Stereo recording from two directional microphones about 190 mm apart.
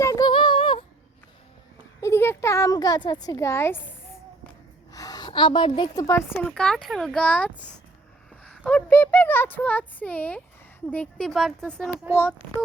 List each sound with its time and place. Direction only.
0.0 s female singing: 20° left (ahead or behind)
2.0 s speech: 15° left (ahead or behind)
4.9 s a woman's voice: 20° left (ahead or behind)
6.5 s speech: 5° left (ahead or behind)